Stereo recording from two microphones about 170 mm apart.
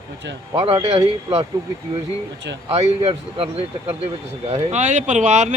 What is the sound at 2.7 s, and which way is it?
Speech, 35° right (ahead or behind).